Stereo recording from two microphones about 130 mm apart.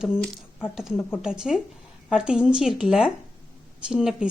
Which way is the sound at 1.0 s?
15° left (ahead or behind).